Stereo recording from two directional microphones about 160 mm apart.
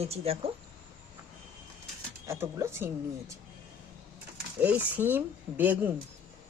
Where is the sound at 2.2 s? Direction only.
15° right (ahead or behind).